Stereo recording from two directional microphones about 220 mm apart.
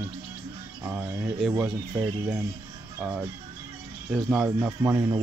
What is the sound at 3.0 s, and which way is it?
Speech, 10° right (ahead or behind).